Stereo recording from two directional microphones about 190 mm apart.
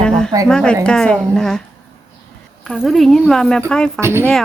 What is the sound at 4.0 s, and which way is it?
Speech, 15° right (ahead or behind).